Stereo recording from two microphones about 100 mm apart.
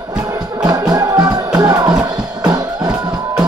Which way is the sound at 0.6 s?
40° right (ahead or behind).